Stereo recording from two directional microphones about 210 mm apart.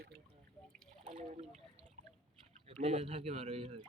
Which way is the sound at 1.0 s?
35° right (ahead or behind).